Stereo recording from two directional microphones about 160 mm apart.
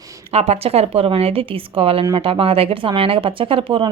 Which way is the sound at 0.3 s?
40° right (ahead or behind).